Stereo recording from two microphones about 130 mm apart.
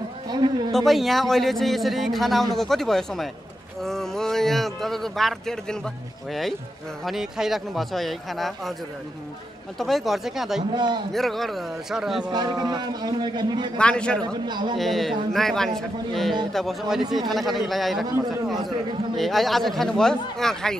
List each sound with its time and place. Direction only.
0.3 s a man's voice: 35° right (ahead or behind)
0.7 s a man's voice: centre (ahead or behind)
7.1 s a man's voice: 5° right (ahead or behind)
9.8 s a man's voice: centre (ahead or behind)
10.7 s a man's voice: 35° right (ahead or behind)
11.1 s a man's voice: centre (ahead or behind)
12.3 s a man's voice: 30° right (ahead or behind)
13.7 s a man's voice: 5° left (ahead or behind)
14.2 s a man's voice: 35° right (ahead or behind)
14.8 s a man's voice: centre (ahead or behind)
19.1 s a man's voice: centre (ahead or behind)